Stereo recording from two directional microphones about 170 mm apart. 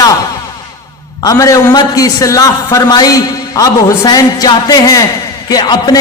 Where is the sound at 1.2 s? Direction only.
20° left (ahead or behind).